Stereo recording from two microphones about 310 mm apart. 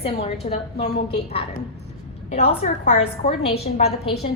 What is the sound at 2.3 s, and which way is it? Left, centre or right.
A woman's voice, left.